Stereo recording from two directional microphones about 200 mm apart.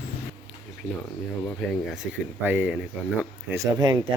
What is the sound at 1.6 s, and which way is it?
Speech, centre (ahead or behind).